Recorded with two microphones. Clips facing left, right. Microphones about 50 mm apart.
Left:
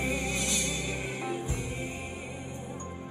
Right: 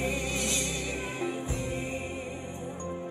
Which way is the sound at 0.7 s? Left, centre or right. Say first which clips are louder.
Even; right.